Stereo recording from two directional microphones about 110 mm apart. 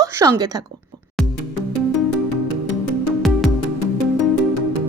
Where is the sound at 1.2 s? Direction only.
Centre (ahead or behind).